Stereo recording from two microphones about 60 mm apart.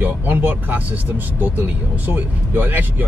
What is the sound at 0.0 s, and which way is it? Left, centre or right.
Speech, right.